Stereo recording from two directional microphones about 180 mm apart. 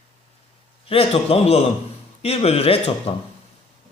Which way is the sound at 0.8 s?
30° left (ahead or behind).